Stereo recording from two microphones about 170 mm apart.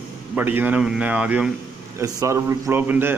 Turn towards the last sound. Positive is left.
turn(degrees=-15)  # may be behind; listen again after turning